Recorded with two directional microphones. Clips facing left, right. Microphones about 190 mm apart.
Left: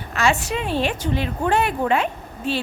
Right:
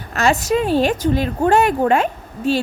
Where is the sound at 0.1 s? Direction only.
40° right (ahead or behind).